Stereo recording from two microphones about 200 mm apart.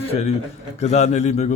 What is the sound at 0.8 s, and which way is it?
Speech, 35° left (ahead or behind).